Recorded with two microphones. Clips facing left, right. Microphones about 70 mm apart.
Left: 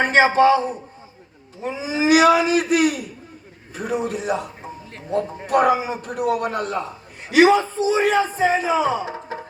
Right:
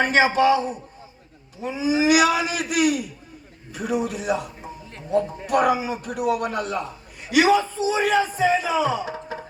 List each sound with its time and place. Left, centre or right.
0.0 s a man's voice: left